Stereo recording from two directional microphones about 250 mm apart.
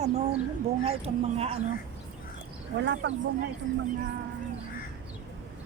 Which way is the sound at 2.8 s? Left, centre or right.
Right.